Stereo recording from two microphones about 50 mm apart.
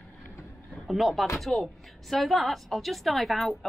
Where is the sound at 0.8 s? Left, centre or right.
Centre.